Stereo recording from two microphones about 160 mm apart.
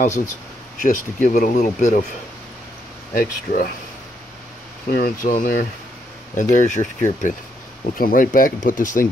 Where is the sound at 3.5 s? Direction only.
65° left (ahead or behind).